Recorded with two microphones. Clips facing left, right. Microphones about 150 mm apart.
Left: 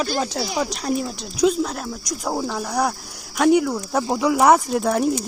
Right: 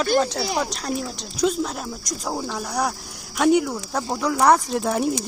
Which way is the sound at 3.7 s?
10° left (ahead or behind).